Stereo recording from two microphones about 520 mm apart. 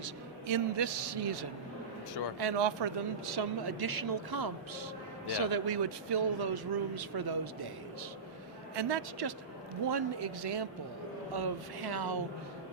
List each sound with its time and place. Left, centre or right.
0.4 s speech: right
8.7 s speech: right